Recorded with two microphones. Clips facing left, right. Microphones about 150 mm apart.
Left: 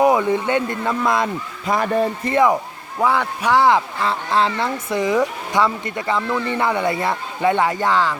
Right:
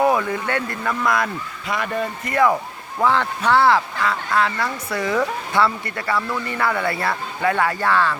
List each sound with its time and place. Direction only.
0.0 s speech: 20° left (ahead or behind)
1.6 s a man's voice: 40° left (ahead or behind)
2.3 s a man's voice: 20° left (ahead or behind)
4.0 s speech: 25° left (ahead or behind)